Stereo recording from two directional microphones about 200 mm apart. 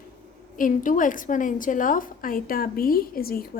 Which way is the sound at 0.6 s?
40° left (ahead or behind).